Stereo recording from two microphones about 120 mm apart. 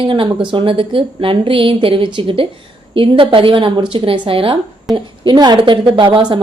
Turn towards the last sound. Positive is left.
turn(degrees=-45)  # may be behind; listen again after turning